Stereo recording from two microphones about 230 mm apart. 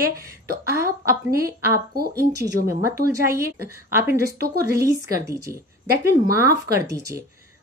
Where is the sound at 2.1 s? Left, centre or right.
Centre.